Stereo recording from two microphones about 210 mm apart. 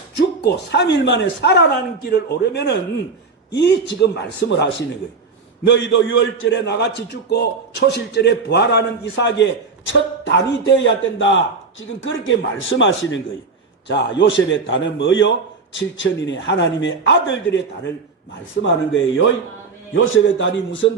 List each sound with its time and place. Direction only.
0.4 s a man's voice: 55° left (ahead or behind)
18.6 s a man's voice: 65° left (ahead or behind)